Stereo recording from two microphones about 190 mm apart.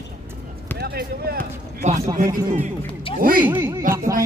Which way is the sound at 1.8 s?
40° right (ahead or behind).